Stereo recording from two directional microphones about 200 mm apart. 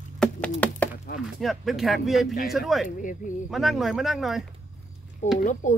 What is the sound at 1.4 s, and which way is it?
Speech, centre (ahead or behind).